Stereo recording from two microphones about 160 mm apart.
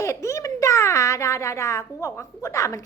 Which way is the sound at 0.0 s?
20° left (ahead or behind).